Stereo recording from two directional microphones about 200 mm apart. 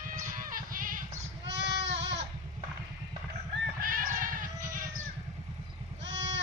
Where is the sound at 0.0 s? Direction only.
45° right (ahead or behind).